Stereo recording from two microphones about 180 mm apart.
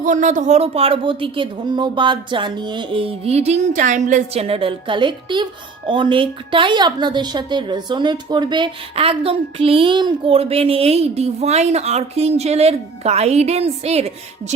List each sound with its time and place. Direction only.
0.0 s a woman's voice: 45° right (ahead or behind)